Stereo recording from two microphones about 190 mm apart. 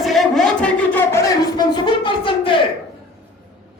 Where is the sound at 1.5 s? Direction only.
25° left (ahead or behind).